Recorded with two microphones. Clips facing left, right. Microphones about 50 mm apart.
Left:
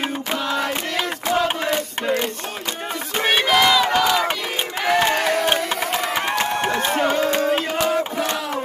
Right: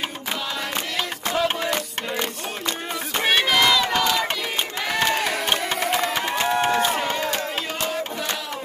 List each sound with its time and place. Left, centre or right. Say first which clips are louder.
1.3 s music: left 3 dB; centre
3.2 s crowd: left 2 dB; centre
5.2 s a sound: left 4 dB; centre
7.2 s music: left 7 dB; left